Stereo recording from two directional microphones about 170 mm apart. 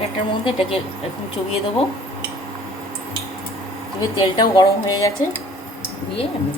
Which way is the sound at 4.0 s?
25° left (ahead or behind).